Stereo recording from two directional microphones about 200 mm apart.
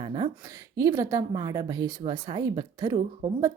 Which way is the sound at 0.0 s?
25° right (ahead or behind).